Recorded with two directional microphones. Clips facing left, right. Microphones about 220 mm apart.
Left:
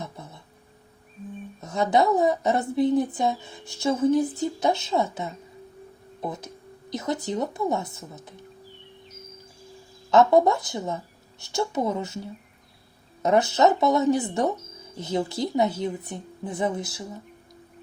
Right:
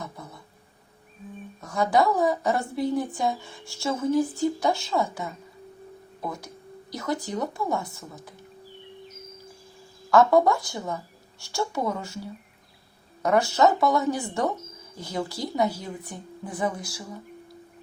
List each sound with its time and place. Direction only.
0.0 s a sound: 25° left (ahead or behind)
1.6 s speech: 20° left (ahead or behind)
10.1 s speech: 20° left (ahead or behind)